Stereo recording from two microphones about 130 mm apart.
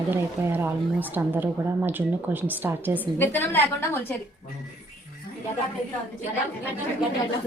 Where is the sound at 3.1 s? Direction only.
15° left (ahead or behind).